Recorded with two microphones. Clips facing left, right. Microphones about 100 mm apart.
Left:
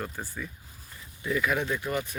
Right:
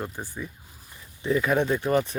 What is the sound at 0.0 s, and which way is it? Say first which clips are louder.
Speech: right 2 dB; 20° right (ahead or behind).